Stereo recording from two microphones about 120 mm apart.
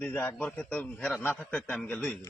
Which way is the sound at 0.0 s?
15° left (ahead or behind).